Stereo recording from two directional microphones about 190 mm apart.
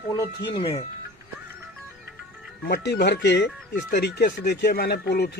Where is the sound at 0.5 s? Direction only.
30° left (ahead or behind).